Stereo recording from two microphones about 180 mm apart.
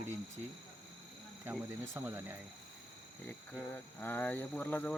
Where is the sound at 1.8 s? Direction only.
15° right (ahead or behind).